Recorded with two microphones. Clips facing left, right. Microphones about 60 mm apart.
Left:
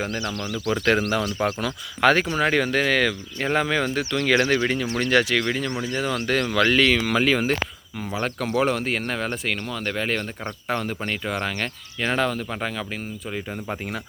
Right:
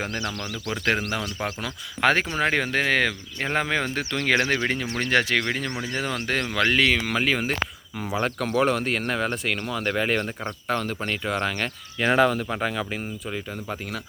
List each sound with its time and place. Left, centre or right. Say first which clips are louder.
0.0 s speech: left 2 dB; right
1.4 s speech: left 7 dB; centre
2.0 s speech: left 2 dB; right
6.1 s speech: left 4 dB; right; by 10.5 s centre
10.7 s speech: even; centre
13.3 s speech: left 4 dB; centre